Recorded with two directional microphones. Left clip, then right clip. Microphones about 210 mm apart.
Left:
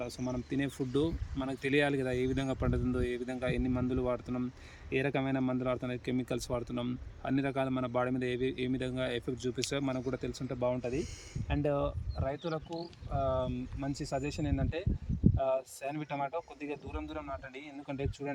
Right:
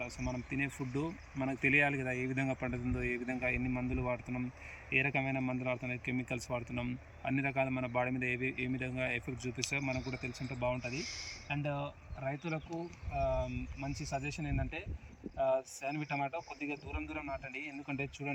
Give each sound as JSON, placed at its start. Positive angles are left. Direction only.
{"t": 0.0, "sound": "speech", "side_deg": 5}